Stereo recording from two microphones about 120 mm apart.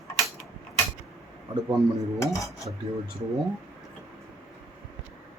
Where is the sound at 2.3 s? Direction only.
25° left (ahead or behind).